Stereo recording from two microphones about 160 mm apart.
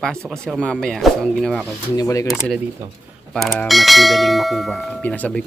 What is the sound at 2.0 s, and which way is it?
Speech, 20° left (ahead or behind).